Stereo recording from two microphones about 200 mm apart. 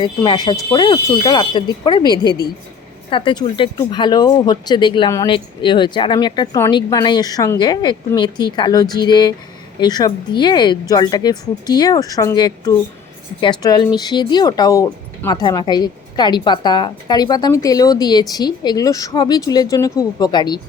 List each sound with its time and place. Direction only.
0.0 s speech: 20° left (ahead or behind)